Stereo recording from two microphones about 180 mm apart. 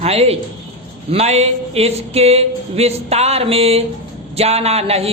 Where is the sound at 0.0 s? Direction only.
35° right (ahead or behind).